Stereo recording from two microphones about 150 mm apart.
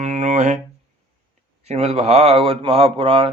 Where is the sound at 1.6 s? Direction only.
45° right (ahead or behind).